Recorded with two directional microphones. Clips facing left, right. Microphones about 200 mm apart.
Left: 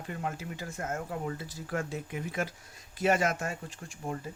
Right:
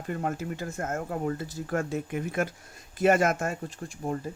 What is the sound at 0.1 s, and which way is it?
Speech, 50° right (ahead or behind).